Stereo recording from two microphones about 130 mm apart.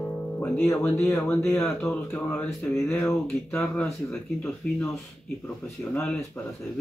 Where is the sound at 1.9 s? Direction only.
15° left (ahead or behind).